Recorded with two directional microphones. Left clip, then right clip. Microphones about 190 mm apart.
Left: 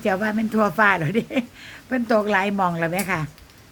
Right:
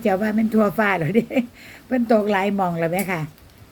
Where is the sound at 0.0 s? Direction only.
15° left (ahead or behind).